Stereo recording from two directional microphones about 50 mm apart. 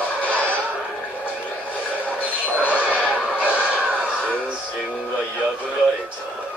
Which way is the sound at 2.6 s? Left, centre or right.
Right.